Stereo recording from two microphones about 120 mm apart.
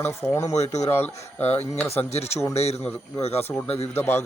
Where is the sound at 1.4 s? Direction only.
65° left (ahead or behind).